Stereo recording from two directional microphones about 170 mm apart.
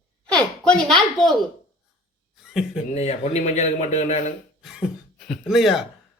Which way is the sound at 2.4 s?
Centre (ahead or behind).